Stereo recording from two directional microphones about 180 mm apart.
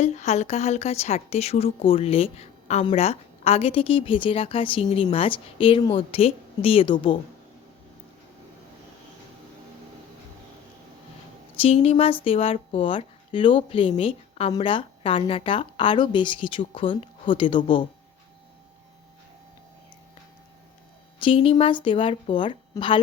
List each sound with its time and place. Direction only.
0.0 s a woman's voice: 40° left (ahead or behind)
11.6 s a woman's voice: 35° left (ahead or behind)
21.2 s speech: 30° left (ahead or behind)